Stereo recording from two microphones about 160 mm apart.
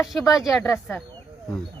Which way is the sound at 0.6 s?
10° left (ahead or behind).